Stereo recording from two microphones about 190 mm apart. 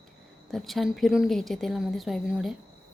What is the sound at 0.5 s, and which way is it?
A woman's voice, centre (ahead or behind).